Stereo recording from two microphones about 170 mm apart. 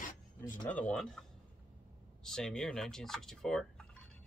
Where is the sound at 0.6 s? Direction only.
10° left (ahead or behind).